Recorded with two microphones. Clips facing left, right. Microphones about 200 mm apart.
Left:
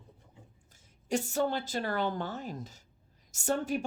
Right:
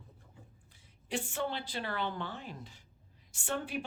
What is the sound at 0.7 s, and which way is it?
A woman's voice, 45° left (ahead or behind).